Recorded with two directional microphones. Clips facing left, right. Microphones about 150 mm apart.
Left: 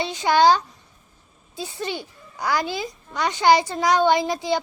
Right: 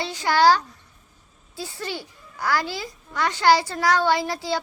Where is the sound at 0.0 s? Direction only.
20° left (ahead or behind).